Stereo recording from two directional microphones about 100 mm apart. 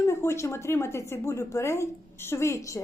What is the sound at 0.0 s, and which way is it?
A woman's voice, 25° left (ahead or behind).